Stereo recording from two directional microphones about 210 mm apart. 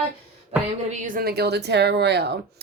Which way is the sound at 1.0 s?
45° right (ahead or behind).